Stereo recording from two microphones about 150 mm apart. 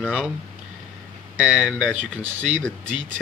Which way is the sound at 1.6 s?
5° right (ahead or behind).